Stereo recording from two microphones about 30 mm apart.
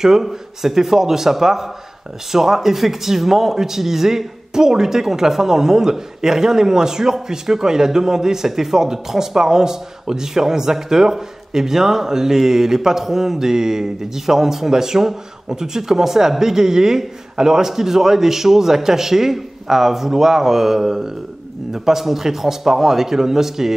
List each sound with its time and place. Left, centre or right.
0.0 s speech: centre